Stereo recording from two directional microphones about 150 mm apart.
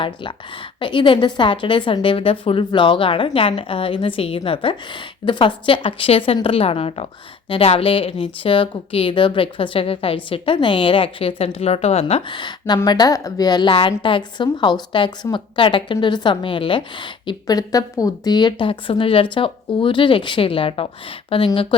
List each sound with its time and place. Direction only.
0.8 s a woman's voice: 35° left (ahead or behind)